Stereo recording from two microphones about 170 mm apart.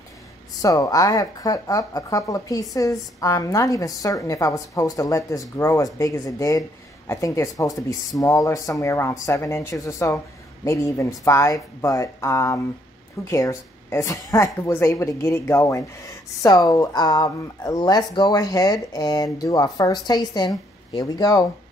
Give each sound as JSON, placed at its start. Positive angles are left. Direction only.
{"t": 0.6, "sound": "speech", "side_deg": 20}